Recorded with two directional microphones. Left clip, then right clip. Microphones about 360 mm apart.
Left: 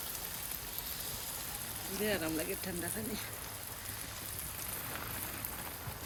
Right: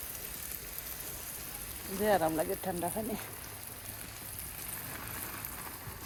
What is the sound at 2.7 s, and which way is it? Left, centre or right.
Speech, right.